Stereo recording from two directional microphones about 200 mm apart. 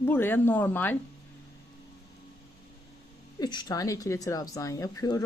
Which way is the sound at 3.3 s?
20° left (ahead or behind).